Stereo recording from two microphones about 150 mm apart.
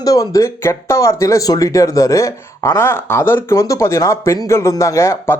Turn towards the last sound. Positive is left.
turn(degrees=20)  # may be behind; listen again after turning